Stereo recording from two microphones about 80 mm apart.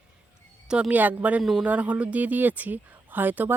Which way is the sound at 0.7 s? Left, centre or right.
Centre.